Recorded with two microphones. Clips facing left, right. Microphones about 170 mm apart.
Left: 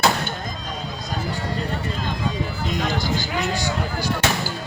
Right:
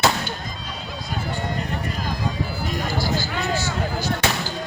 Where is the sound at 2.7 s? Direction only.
20° left (ahead or behind).